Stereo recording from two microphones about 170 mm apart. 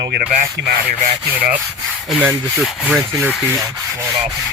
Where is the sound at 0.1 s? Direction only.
55° right (ahead or behind).